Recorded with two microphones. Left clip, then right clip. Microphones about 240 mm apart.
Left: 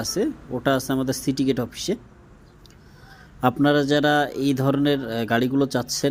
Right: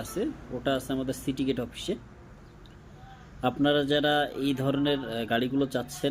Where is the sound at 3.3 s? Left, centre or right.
Left.